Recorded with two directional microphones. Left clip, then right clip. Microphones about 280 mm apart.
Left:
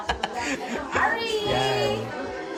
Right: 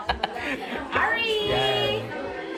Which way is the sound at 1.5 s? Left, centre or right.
Centre.